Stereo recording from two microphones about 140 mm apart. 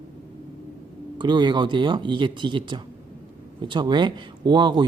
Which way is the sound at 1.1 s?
30° right (ahead or behind).